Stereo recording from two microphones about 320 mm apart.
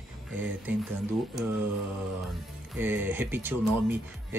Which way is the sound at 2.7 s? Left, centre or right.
Centre.